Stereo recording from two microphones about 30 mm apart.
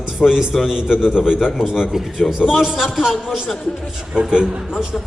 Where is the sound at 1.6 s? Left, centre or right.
Centre.